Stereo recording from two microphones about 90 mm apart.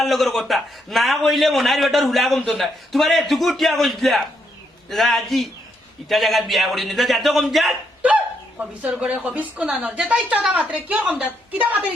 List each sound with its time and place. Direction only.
0.0 s a man's voice: centre (ahead or behind)
8.0 s speech: 15° right (ahead or behind)